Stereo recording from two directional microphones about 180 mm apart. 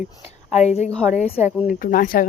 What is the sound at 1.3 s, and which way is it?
Speech, 5° right (ahead or behind).